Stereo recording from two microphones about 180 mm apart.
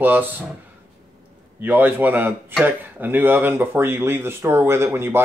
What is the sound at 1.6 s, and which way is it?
Speech, 10° right (ahead or behind).